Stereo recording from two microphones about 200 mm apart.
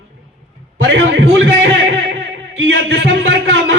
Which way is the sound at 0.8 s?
65° right (ahead or behind).